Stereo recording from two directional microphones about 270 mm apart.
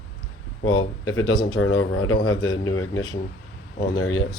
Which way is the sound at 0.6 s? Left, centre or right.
Left.